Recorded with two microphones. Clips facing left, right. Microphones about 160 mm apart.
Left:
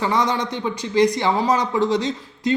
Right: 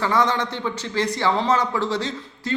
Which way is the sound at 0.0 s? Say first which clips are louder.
Even; 15° left (ahead or behind).